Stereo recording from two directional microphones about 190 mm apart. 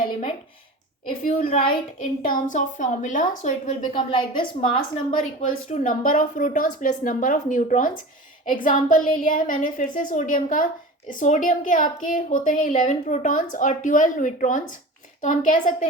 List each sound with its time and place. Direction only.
0.0 s a sound: 40° left (ahead or behind)
1.2 s a woman's voice: 30° left (ahead or behind)
2.2 s a woman's voice: 45° left (ahead or behind)
3.9 s a woman's voice: 25° left (ahead or behind)
4.8 s a woman's voice: 40° left (ahead or behind)